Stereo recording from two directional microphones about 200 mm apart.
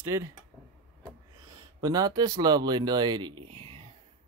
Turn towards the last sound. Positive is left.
turn(degrees=-25)  # may be behind; listen again after turning